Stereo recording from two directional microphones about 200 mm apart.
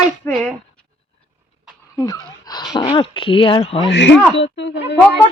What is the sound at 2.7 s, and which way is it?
Speech, 25° left (ahead or behind).